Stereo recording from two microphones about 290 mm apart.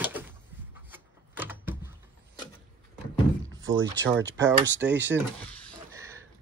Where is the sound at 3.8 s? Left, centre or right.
Right.